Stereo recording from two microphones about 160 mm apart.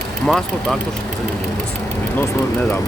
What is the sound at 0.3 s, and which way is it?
Speech, centre (ahead or behind).